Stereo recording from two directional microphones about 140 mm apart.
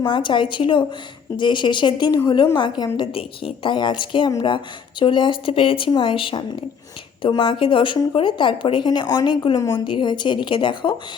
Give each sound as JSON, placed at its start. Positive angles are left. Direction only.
{"t": 0.1, "sound": "a woman's voice", "side_deg": 35}